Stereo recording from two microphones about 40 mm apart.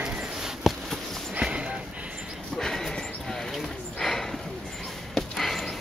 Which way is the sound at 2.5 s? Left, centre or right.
Centre.